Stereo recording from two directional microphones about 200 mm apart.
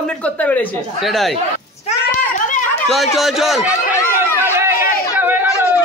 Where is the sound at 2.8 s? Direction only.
Centre (ahead or behind).